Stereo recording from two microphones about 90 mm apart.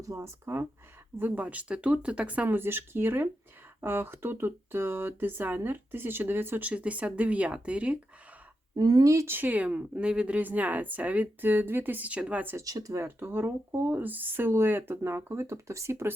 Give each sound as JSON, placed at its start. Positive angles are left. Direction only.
{"t": 0.0, "sound": "speech", "side_deg": -35}
{"t": 8.7, "sound": "speech", "side_deg": -45}
{"t": 12.5, "sound": "speech", "side_deg": -40}
{"t": 13.1, "sound": "speech", "side_deg": -25}